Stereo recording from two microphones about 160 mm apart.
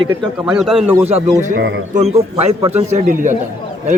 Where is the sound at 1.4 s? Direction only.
50° right (ahead or behind).